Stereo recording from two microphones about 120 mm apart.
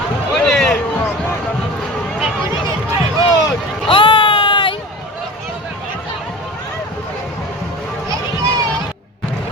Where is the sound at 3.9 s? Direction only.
45° left (ahead or behind).